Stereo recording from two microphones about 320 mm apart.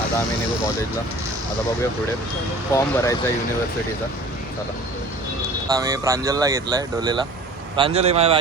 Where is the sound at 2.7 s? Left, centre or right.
Centre.